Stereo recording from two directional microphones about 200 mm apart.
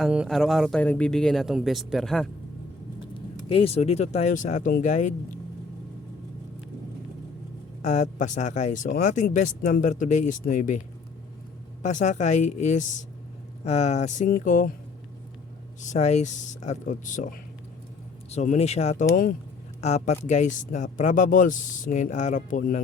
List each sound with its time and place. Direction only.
0.0 s speech: centre (ahead or behind)
3.2 s speech: 30° left (ahead or behind)
7.8 s speech: 35° left (ahead or behind)
15.8 s speech: 35° left (ahead or behind)